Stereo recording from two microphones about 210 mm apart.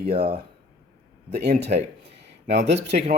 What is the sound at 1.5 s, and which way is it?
Speech, 50° right (ahead or behind).